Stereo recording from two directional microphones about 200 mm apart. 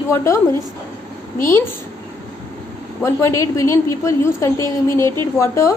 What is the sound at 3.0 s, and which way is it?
A woman's voice, 15° left (ahead or behind).